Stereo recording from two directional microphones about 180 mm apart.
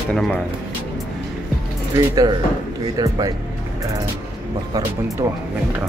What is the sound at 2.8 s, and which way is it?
Speech, 20° right (ahead or behind).